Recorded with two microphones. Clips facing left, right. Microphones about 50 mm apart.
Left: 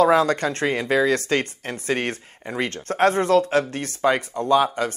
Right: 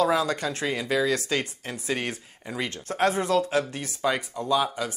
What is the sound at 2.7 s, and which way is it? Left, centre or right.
Speech, left.